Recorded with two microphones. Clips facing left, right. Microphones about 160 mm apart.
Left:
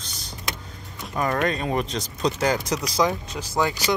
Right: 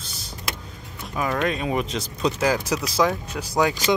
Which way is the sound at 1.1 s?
Centre (ahead or behind).